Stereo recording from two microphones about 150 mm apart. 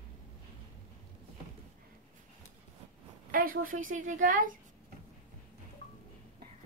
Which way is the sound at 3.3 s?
65° right (ahead or behind).